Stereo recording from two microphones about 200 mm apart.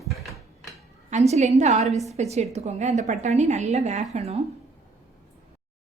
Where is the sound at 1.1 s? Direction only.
35° right (ahead or behind).